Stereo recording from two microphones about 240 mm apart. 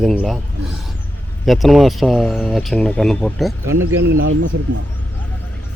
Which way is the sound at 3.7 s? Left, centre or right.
Right.